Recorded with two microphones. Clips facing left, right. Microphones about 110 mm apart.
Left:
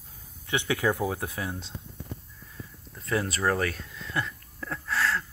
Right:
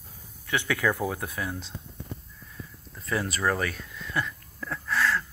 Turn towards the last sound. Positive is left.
turn(degrees=30)  # may be behind; listen again after turning